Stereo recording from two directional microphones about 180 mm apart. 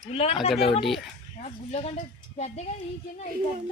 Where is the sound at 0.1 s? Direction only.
30° left (ahead or behind).